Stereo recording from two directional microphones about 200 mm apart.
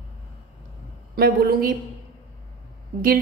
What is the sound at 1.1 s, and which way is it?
Speech, 45° right (ahead or behind).